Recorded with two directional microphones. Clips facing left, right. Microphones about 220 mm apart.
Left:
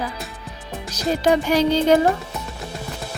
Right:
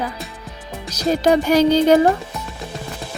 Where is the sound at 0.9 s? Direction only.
40° right (ahead or behind).